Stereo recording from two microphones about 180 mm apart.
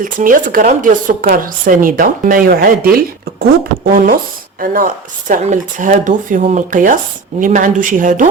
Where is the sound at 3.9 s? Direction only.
50° right (ahead or behind).